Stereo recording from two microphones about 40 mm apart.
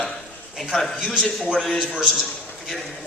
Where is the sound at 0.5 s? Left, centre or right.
Centre.